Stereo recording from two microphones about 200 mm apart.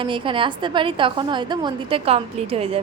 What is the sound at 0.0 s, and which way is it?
A woman's voice, 25° right (ahead or behind).